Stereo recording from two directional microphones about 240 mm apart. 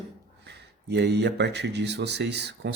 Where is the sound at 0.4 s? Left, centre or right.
Right.